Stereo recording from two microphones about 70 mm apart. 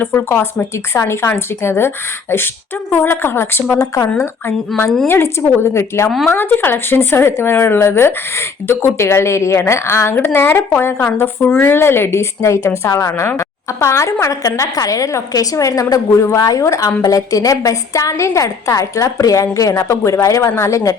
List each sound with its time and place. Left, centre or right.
0.0 s speech: left
2.9 s speech: left
3.8 s a woman's voice: left
4.7 s speech: centre
5.0 s speech: left
6.1 s speech: centre
6.3 s a woman's voice: left